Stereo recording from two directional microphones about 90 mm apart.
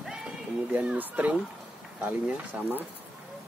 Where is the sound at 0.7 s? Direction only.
20° right (ahead or behind).